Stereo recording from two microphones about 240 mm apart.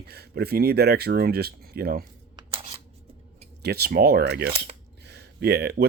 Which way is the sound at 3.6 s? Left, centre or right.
Right.